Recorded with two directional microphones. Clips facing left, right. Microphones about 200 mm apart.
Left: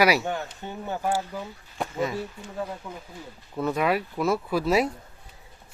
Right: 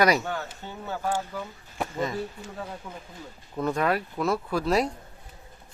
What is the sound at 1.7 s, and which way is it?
Speech, 5° left (ahead or behind).